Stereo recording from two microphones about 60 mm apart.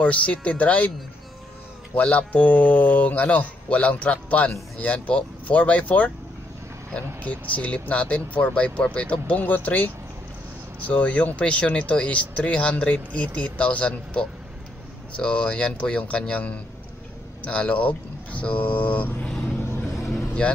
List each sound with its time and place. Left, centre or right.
0.0 s speech: left
2.0 s speech: left
10.9 s speech: left